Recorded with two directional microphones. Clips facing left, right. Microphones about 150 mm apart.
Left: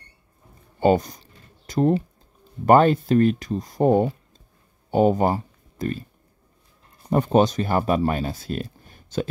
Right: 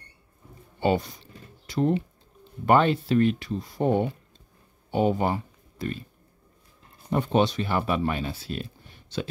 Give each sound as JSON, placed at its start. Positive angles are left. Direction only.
{"t": 0.7, "sound": "a sound", "side_deg": 45}
{"t": 2.6, "sound": "speech", "side_deg": 45}
{"t": 7.1, "sound": "speech", "side_deg": 40}